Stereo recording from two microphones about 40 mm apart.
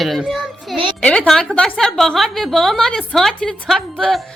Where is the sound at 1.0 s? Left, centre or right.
Left.